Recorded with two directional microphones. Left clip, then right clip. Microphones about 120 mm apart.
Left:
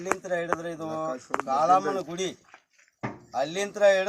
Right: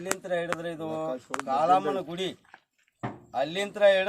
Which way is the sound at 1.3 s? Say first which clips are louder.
Left 4 dB; 10° right (ahead or behind).